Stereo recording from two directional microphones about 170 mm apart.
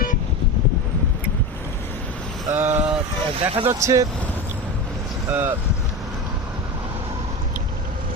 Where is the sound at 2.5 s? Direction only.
10° right (ahead or behind).